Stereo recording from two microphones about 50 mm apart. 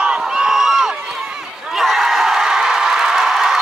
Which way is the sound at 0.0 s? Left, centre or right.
Centre.